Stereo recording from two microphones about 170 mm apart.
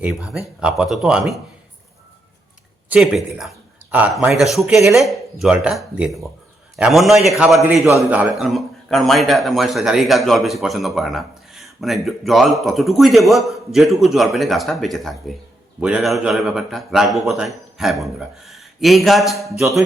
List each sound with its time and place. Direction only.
0.0 s a man's voice: 5° right (ahead or behind)
2.9 s a man's voice: 5° right (ahead or behind)
7.6 s a man's voice: 15° right (ahead or behind)
7.9 s a man's voice: 5° right (ahead or behind)